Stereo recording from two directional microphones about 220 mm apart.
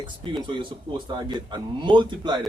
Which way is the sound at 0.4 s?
20° right (ahead or behind).